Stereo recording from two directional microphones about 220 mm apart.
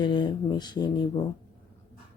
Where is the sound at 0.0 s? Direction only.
20° left (ahead or behind).